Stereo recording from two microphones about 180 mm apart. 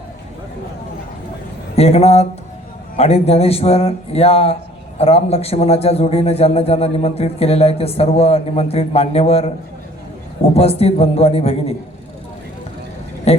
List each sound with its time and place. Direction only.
1.7 s a man's voice: 35° left (ahead or behind)
10.5 s a man's voice: 35° left (ahead or behind)
13.3 s a woman's voice: 35° left (ahead or behind)